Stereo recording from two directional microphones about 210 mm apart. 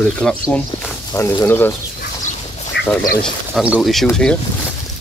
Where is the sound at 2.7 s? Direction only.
55° left (ahead or behind).